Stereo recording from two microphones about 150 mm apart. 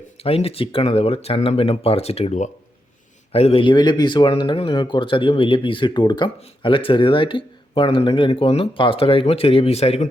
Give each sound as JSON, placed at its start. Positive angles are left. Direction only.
{"t": 0.2, "sound": "speech", "side_deg": 40}